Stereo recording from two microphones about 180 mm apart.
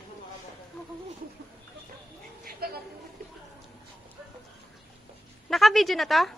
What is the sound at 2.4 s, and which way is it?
Bird, 55° right (ahead or behind).